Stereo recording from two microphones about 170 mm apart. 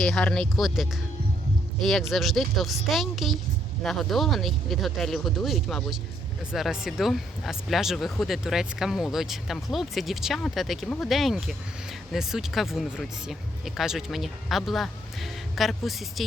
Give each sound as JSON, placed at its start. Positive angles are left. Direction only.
{"t": 0.0, "sound": "speech", "side_deg": 5}